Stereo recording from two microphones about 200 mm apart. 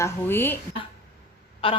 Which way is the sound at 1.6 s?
25° left (ahead or behind).